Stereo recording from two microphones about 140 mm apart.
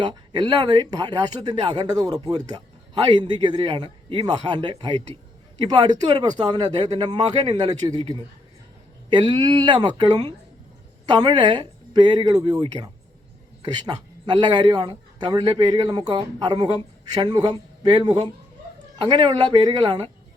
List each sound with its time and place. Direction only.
0.0 s a man's voice: 30° right (ahead or behind)